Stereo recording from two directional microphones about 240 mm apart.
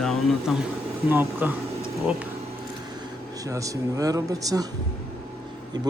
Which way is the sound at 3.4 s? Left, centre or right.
Centre.